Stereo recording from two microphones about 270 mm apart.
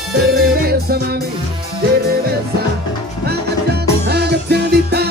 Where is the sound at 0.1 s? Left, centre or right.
Right.